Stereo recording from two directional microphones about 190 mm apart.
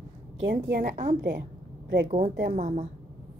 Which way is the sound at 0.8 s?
40° right (ahead or behind).